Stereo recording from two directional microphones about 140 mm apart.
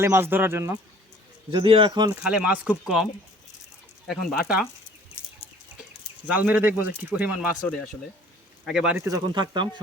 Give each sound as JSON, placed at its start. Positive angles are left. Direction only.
{"t": 0.0, "sound": "speech", "side_deg": -15}
{"t": 1.5, "sound": "a man's voice", "side_deg": -35}
{"t": 2.2, "sound": "speech", "side_deg": -5}
{"t": 6.2, "sound": "speech", "side_deg": -10}
{"t": 7.6, "sound": "speech", "side_deg": 5}
{"t": 8.6, "sound": "speech", "side_deg": -5}
{"t": 9.0, "sound": "speech", "side_deg": -25}